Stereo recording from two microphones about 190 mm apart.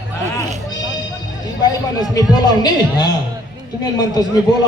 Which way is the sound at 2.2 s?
20° left (ahead or behind).